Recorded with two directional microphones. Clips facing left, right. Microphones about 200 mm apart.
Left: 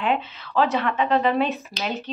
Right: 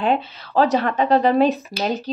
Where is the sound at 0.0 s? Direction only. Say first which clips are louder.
Right 4 dB; 35° right (ahead or behind).